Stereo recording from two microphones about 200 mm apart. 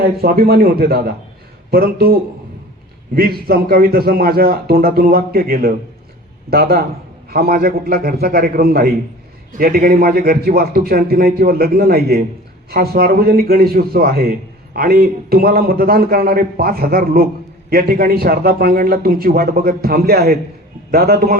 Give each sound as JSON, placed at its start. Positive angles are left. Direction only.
{"t": 0.0, "sound": "a man's voice", "side_deg": -50}